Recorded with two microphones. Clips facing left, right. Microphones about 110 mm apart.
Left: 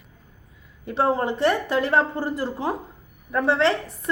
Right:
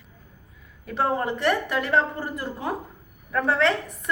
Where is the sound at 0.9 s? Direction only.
25° left (ahead or behind).